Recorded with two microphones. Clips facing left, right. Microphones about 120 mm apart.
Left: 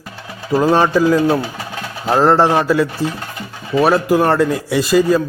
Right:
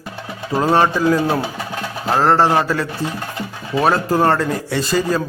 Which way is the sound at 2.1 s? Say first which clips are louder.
Left 2 dB; 15° left (ahead or behind).